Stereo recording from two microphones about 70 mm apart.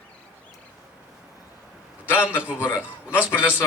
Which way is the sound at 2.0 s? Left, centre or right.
Left.